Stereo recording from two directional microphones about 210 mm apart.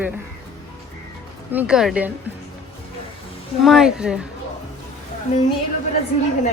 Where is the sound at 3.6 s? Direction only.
Centre (ahead or behind).